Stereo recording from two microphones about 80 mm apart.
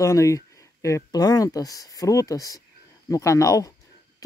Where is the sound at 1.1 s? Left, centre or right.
Left.